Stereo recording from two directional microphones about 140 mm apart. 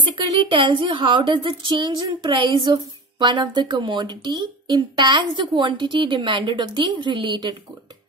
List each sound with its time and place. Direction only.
0.4 s speech: 40° right (ahead or behind)